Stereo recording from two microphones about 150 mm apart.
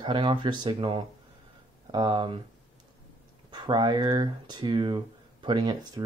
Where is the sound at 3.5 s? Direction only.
30° right (ahead or behind).